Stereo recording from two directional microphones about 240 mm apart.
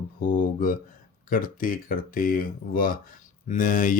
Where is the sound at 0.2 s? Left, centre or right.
Left.